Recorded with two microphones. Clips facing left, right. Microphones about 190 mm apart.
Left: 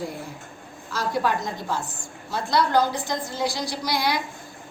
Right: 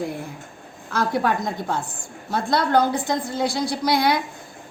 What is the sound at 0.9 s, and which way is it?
A woman's voice, 55° right (ahead or behind).